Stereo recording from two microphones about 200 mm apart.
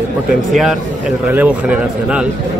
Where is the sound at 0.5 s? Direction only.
Centre (ahead or behind).